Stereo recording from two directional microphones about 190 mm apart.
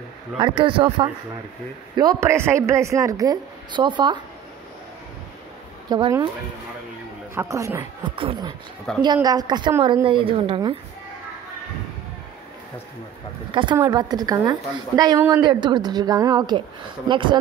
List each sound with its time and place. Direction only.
0.4 s a woman's voice: 25° right (ahead or behind)
5.9 s a woman's voice: 25° right (ahead or behind)
7.3 s a woman's voice: 15° right (ahead or behind)
10.0 s a woman's voice: 25° right (ahead or behind)
13.5 s a woman's voice: 25° right (ahead or behind)
15.4 s a woman's voice: 25° right (ahead or behind)